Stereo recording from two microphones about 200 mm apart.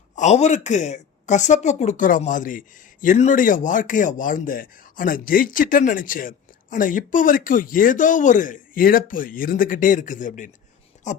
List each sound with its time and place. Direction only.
0.2 s speech: 35° left (ahead or behind)